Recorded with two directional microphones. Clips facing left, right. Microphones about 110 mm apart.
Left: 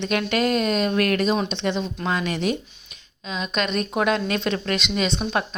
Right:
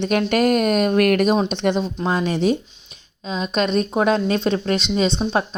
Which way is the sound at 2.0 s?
30° right (ahead or behind).